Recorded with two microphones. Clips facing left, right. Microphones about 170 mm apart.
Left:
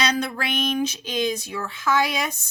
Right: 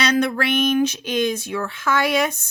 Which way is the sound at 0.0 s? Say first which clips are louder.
Right 5 dB; 70° right (ahead or behind).